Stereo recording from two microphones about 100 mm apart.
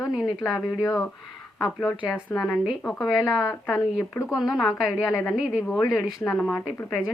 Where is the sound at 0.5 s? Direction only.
30° left (ahead or behind).